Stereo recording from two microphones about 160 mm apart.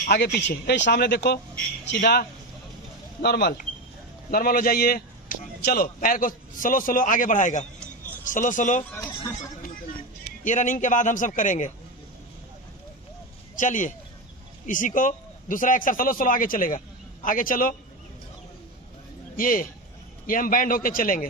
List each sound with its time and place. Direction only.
0.1 s speech: 90° left
4.3 s a man's voice: 65° left (ahead or behind)
10.4 s a man's voice: 50° left (ahead or behind)
13.6 s a man's voice: 55° left (ahead or behind)
19.3 s a man's voice: 60° left (ahead or behind)